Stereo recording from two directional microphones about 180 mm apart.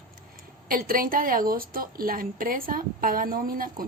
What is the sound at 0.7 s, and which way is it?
A woman's voice, 50° right (ahead or behind).